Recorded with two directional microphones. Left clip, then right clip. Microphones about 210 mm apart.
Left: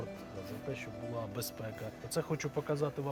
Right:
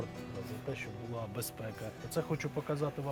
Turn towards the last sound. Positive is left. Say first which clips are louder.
# left 1 dB
turn(degrees=30)  # may be behind; listen again after turning